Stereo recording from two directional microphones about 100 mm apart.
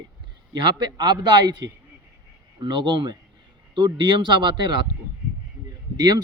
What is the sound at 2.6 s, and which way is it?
Speech, 50° right (ahead or behind).